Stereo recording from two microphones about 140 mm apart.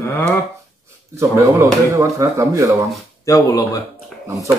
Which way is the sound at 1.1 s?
20° right (ahead or behind).